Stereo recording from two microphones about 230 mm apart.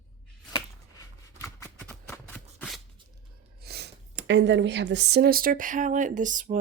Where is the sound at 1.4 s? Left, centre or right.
Centre.